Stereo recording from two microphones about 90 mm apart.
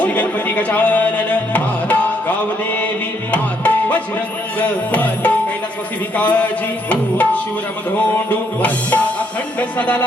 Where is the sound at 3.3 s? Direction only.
15° left (ahead or behind).